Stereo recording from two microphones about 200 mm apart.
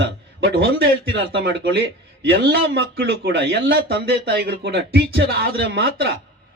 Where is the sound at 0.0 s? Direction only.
55° right (ahead or behind).